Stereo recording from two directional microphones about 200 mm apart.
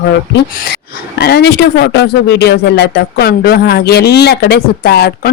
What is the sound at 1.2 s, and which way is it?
Speech, 55° left (ahead or behind).